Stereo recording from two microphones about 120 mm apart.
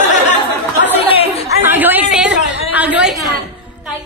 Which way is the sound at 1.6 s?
15° right (ahead or behind).